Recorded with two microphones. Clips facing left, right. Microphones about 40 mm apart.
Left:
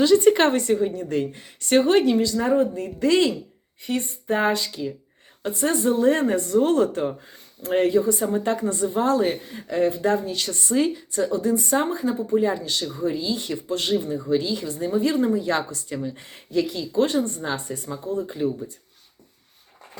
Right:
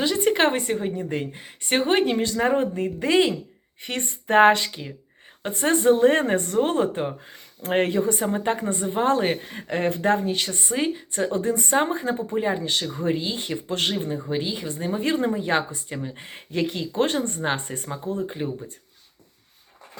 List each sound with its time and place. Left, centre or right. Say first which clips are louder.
0.0 s a woman's voice: left 5 dB; centre
0.5 s a woman's voice: left 4 dB; right
2.0 s speech: left 2 dB; right
2.8 s a woman's voice: left 1 dB; right
3.8 s speech: left 3 dB; right
4.7 s speech: left 7 dB; right
7.3 s speech: left 1 dB; right
12.3 s speech: left 3 dB; right